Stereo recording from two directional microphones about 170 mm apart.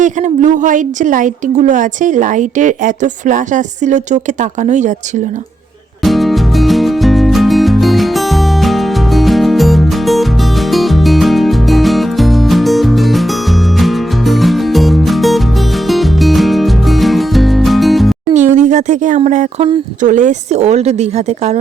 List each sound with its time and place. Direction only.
0.0 s a woman's voice: 45° right (ahead or behind)
6.0 s music: centre (ahead or behind)
18.3 s a woman's voice: 45° right (ahead or behind)